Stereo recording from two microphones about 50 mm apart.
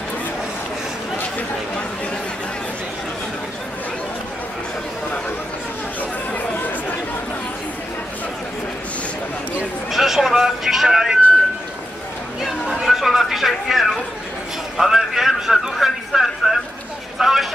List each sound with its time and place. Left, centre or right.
5.9 s chatter: left
9.8 s vehicle: centre
12.4 s chatter: centre
14.8 s a sound: centre
17.2 s vehicle: centre